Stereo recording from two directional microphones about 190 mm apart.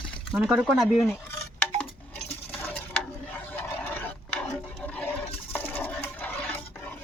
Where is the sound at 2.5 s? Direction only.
10° left (ahead or behind).